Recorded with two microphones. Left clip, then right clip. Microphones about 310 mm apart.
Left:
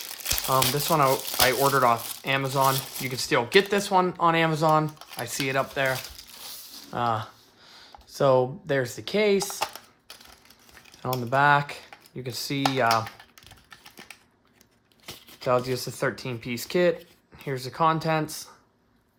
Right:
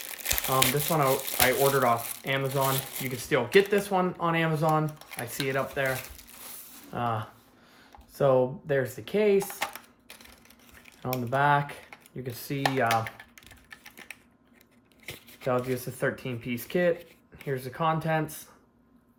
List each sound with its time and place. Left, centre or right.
0.4 s speech: left
11.0 s speech: left
15.0 s speech: centre